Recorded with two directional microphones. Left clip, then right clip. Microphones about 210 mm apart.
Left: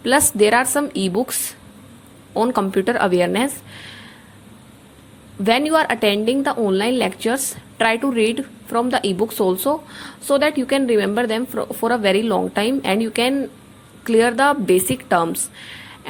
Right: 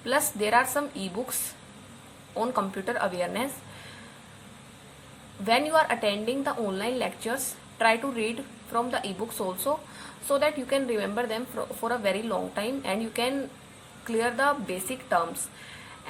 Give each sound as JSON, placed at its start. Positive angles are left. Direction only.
{"t": 0.0, "sound": "a woman's voice", "side_deg": 40}
{"t": 2.3, "sound": "a woman's voice", "side_deg": 40}
{"t": 5.5, "sound": "a woman's voice", "side_deg": 40}